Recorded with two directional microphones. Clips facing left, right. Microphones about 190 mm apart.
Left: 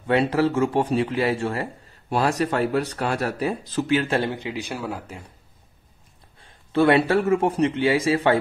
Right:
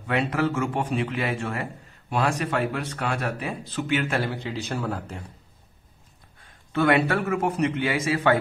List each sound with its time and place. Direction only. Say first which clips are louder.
0.0 s a man's voice: left 5 dB; 30° left (ahead or behind); by 5.2 s 5° left (ahead or behind)
6.4 s a man's voice: left 4 dB; 30° left (ahead or behind)